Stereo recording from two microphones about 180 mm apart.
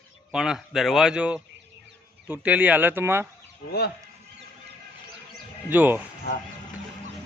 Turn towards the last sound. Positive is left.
turn(degrees=65)  # may be behind; listen again after turning